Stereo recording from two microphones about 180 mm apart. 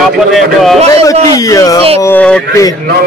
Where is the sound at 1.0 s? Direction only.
20° left (ahead or behind).